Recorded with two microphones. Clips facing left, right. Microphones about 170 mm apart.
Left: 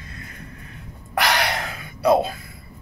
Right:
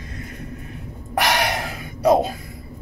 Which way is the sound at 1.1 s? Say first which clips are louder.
Right 1 dB; 15° right (ahead or behind).